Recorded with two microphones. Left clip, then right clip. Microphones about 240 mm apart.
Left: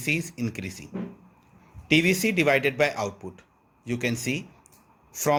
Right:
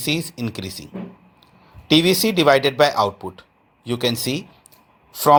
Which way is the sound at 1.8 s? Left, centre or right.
Centre.